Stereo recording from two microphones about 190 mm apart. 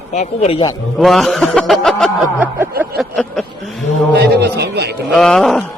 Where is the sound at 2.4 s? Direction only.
10° right (ahead or behind).